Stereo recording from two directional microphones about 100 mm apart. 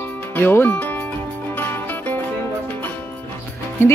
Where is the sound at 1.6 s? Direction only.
20° left (ahead or behind).